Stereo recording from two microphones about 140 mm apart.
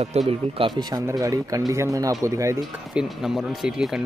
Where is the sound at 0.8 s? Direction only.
25° right (ahead or behind).